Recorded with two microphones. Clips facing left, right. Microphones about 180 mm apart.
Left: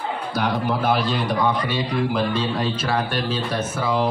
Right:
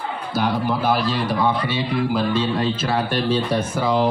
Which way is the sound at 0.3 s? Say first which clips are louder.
Right 2 dB; centre (ahead or behind).